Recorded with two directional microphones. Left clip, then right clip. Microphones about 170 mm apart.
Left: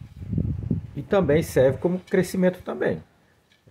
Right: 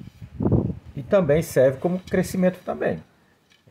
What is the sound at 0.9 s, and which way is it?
Speech, 15° left (ahead or behind).